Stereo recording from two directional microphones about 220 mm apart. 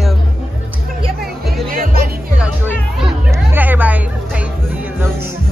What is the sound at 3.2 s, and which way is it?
Music, 10° right (ahead or behind).